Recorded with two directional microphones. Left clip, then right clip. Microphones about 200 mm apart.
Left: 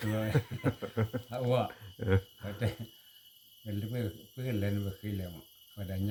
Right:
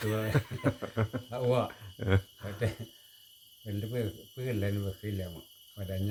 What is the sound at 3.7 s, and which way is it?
Speech, 10° right (ahead or behind).